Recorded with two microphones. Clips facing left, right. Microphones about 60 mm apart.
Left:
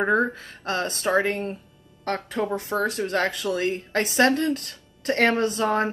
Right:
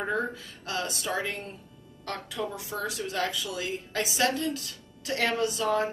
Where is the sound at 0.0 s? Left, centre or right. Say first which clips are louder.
Left 8 dB; left.